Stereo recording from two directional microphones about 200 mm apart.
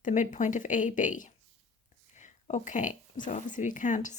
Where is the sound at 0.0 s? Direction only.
40° left (ahead or behind).